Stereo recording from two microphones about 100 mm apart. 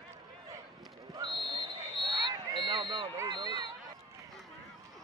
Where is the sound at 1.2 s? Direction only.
50° right (ahead or behind).